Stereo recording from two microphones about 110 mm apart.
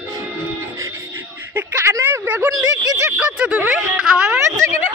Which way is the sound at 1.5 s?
25° right (ahead or behind).